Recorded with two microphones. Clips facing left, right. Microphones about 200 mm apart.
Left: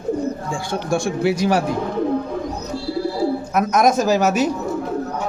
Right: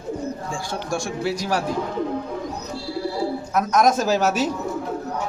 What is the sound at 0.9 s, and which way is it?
Speech, 60° left (ahead or behind).